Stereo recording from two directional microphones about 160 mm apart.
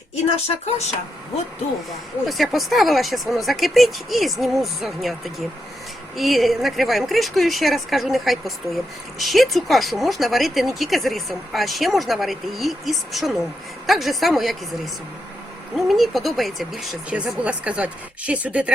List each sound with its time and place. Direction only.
0.4 s speech: 40° left (ahead or behind)
2.2 s speech: centre (ahead or behind)
15.7 s speech: centre (ahead or behind)